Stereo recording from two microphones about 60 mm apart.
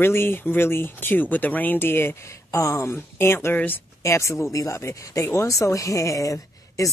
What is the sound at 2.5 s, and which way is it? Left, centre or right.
Speech, left.